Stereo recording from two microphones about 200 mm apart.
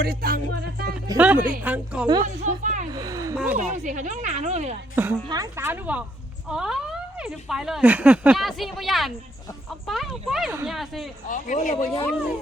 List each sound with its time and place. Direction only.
0.0 s music: 50° right (ahead or behind)
1.0 s a woman's voice: 10° right (ahead or behind)
1.4 s music: 45° right (ahead or behind)
1.6 s a woman's voice: 5° right (ahead or behind)
2.2 s speech: 35° right (ahead or behind)
2.9 s a sound: 20° right (ahead or behind)
3.3 s speech: 5° right (ahead or behind)
3.6 s speech: 40° right (ahead or behind)
4.9 s a woman's voice: 15° right (ahead or behind)
11.3 s speech: 40° left (ahead or behind)